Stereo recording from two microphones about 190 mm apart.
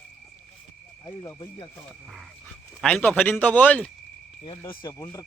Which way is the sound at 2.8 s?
5° left (ahead or behind).